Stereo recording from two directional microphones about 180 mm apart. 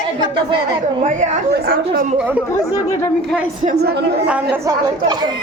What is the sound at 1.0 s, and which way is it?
Speech, 45° right (ahead or behind).